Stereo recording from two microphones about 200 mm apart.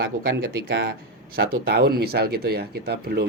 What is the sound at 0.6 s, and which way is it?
Speech, 60° right (ahead or behind).